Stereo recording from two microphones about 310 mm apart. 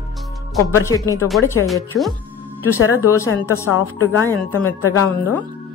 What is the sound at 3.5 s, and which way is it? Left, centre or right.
A woman's voice, left.